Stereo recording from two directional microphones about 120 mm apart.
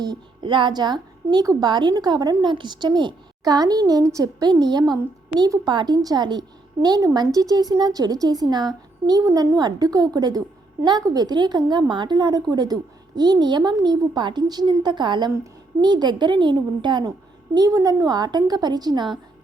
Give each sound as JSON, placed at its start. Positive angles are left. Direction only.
{"t": 0.0, "sound": "a woman's voice", "side_deg": -35}